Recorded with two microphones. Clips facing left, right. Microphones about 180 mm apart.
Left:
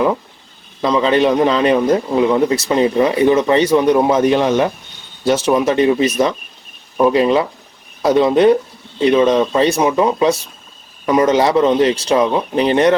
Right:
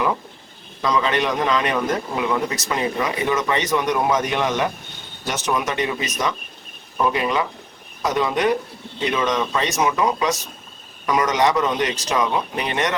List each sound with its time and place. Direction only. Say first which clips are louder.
0.8 s a man's voice: left 7 dB; 25° left (ahead or behind)